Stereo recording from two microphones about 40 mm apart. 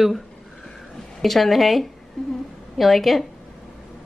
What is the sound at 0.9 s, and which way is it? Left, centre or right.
A woman's voice, centre.